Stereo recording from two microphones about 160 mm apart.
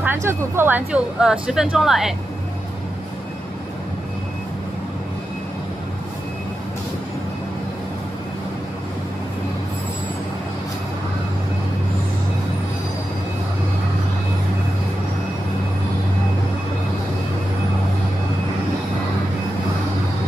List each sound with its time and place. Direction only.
0.0 s speech: 15° right (ahead or behind)